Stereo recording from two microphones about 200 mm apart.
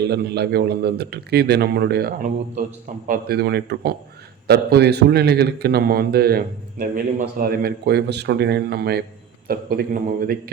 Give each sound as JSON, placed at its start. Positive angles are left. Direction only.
{"t": 0.0, "sound": "a man's voice", "side_deg": -55}
{"t": 3.1, "sound": "a man's voice", "side_deg": -50}